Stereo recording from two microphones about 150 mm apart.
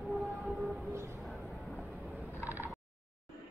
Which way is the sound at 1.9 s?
10° right (ahead or behind).